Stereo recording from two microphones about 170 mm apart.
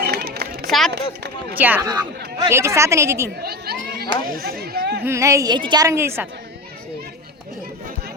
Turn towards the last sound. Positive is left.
turn(degrees=-15)  # may be behind; listen again after turning